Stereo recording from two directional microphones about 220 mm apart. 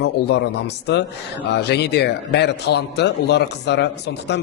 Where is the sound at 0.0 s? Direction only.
50° left (ahead or behind).